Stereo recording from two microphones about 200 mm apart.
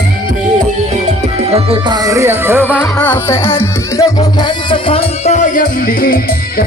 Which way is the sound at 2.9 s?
10° left (ahead or behind).